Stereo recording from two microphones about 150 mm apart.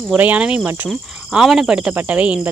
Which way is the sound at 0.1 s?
10° right (ahead or behind).